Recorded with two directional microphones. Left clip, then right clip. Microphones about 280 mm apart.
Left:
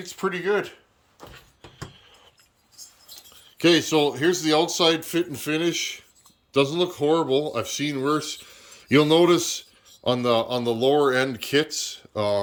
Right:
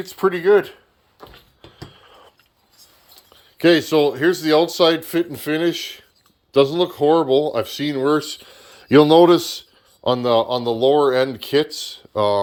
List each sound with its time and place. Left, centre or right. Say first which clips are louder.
0.0 s speech: right 8 dB; centre
3.6 s speech: right 4 dB; centre